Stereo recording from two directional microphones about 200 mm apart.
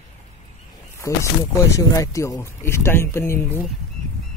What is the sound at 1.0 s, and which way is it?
Speech, 15° left (ahead or behind).